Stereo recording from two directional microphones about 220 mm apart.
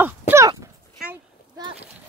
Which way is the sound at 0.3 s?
15° right (ahead or behind).